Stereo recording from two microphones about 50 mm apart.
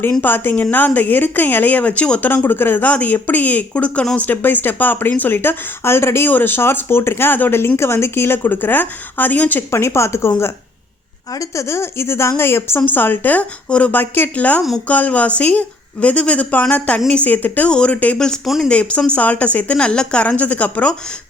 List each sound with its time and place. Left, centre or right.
0.2 s speech: left
2.2 s speech: left
4.3 s speech: left
6.2 s speech: left
7.8 s speech: left
9.7 s speech: left
11.3 s a woman's voice: left
12.9 s speech: left
13.9 s a woman's voice: left
17.7 s a woman's voice: centre
17.9 s speech: left
18.4 s speech: centre
18.7 s a woman's voice: left
20.2 s speech: left